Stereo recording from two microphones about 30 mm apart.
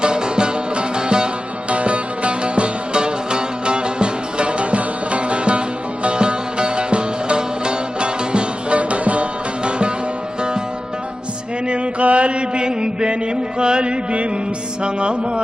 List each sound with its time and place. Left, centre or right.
0.0 s music: right
1.7 s music: right
9.6 s music: right
11.7 s mantra: right
13.6 s music: right